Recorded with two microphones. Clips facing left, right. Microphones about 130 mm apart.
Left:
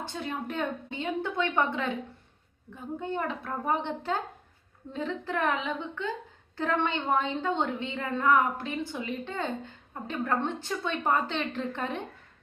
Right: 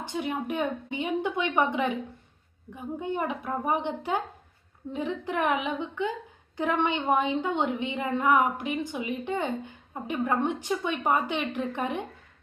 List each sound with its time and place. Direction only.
0.0 s a woman's voice: 15° right (ahead or behind)